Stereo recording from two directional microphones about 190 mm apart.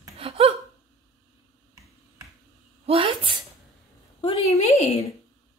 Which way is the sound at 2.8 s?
30° right (ahead or behind).